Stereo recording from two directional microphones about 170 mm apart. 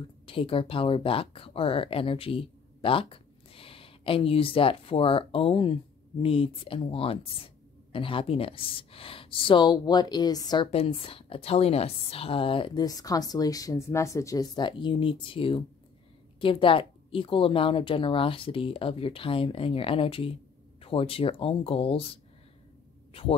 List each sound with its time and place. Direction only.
0.3 s speech: 30° left (ahead or behind)